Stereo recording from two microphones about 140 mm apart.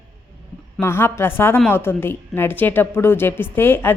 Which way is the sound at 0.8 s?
20° left (ahead or behind).